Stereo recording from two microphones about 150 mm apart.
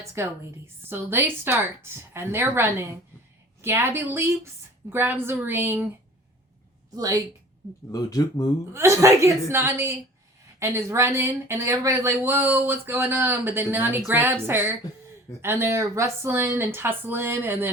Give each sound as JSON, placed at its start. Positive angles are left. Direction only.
{"t": 0.0, "sound": "a woman's voice", "side_deg": -20}
{"t": 6.9, "sound": "a woman's voice", "side_deg": -25}
{"t": 7.9, "sound": "speech", "side_deg": 25}
{"t": 8.7, "sound": "a woman's voice", "side_deg": -20}